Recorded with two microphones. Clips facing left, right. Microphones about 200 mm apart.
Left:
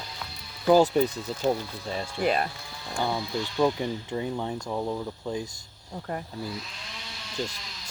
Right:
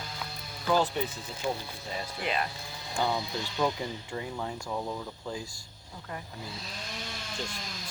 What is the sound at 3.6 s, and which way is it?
Speech, 20° left (ahead or behind).